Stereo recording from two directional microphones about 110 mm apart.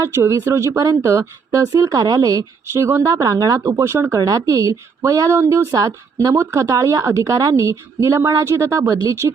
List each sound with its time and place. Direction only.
0.0 s speech: 25° right (ahead or behind)